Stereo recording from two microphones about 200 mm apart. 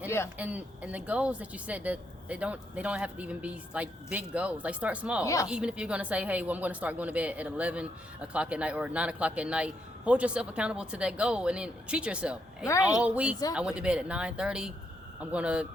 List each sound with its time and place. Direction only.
0.3 s speech: 5° right (ahead or behind)
5.2 s a woman's voice: 15° left (ahead or behind)
5.5 s a woman's voice: 5° right (ahead or behind)
12.6 s a woman's voice: 15° left (ahead or behind)
13.0 s a woman's voice: 5° right (ahead or behind)